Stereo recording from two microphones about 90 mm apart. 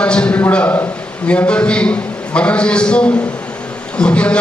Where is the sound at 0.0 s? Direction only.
10° left (ahead or behind).